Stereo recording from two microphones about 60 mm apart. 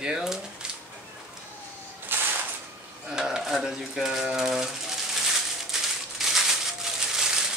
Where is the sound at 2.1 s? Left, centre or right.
Right.